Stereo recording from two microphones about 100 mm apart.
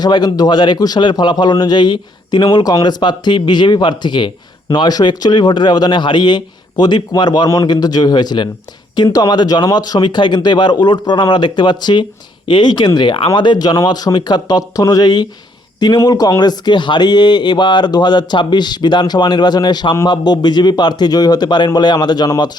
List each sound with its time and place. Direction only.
0.0 s speech: 45° left (ahead or behind)